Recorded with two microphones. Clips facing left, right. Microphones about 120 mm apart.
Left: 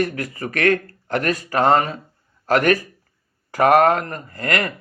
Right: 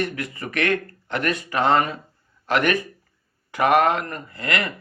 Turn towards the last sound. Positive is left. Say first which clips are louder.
# left 3 dB
turn(degrees=45)  # may be behind; listen again after turning